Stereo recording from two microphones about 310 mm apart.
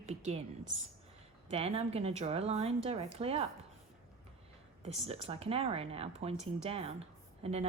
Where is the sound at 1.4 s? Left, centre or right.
Centre.